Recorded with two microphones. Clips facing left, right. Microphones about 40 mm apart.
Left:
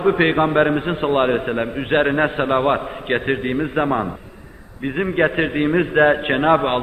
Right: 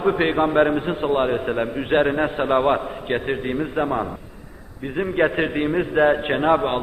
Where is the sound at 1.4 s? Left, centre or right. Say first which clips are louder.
Left 1 dB; centre.